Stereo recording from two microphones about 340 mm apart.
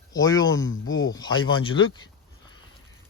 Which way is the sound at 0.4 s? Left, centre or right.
Left.